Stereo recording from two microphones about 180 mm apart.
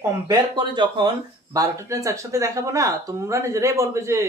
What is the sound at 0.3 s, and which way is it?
Speech, 25° right (ahead or behind).